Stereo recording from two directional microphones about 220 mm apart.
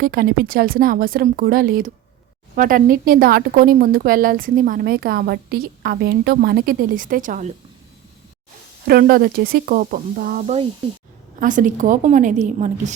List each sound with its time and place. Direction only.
0.0 s a woman's voice: 45° right (ahead or behind)
8.9 s a woman's voice: 45° right (ahead or behind)